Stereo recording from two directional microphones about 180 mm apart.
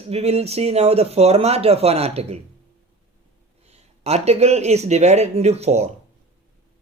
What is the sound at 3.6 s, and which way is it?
Speech, 35° right (ahead or behind).